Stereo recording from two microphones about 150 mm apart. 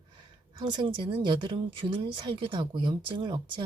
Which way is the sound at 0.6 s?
30° right (ahead or behind).